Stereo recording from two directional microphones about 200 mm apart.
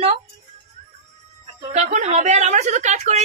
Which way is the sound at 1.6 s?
35° right (ahead or behind).